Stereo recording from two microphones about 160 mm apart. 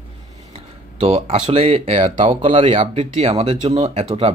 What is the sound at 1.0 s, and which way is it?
Speech, 40° right (ahead or behind).